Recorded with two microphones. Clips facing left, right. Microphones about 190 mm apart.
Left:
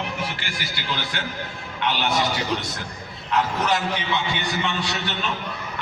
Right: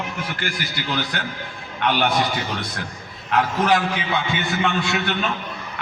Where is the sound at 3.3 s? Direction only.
55° right (ahead or behind).